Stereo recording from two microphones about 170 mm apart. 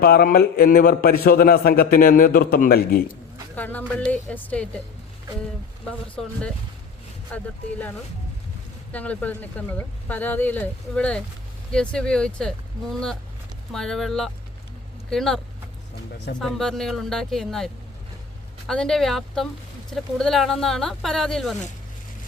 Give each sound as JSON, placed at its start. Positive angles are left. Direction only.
{"t": 0.0, "sound": "a man's voice", "side_deg": 65}
{"t": 3.5, "sound": "speech", "side_deg": 10}
{"t": 6.2, "sound": "speech", "side_deg": 0}
{"t": 7.3, "sound": "speech", "side_deg": 10}
{"t": 16.4, "sound": "speech", "side_deg": 5}
{"t": 18.7, "sound": "speech", "side_deg": 5}